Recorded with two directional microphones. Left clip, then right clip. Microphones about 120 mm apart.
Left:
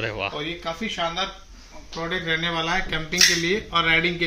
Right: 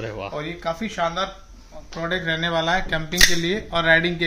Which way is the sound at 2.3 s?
60° right (ahead or behind).